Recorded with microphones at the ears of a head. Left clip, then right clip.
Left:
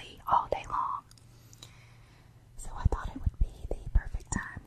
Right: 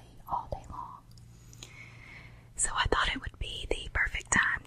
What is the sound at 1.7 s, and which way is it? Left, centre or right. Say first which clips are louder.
Whispering: right 10 dB; right.